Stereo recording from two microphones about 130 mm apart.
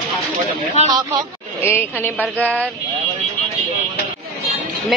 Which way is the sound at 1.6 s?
20° left (ahead or behind).